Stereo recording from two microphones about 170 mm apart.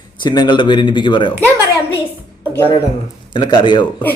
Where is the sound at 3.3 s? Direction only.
25° left (ahead or behind).